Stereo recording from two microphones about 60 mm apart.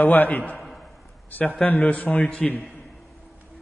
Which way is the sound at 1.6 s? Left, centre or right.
Left.